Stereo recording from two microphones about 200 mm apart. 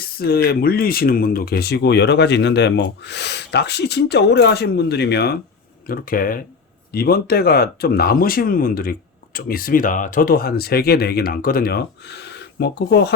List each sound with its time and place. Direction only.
0.0 s speech: 50° left (ahead or behind)